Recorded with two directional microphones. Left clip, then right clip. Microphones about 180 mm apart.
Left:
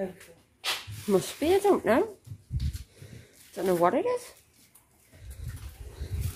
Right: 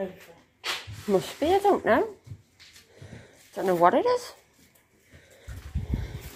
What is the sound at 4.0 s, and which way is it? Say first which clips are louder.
Speech: right 4 dB; centre (ahead or behind).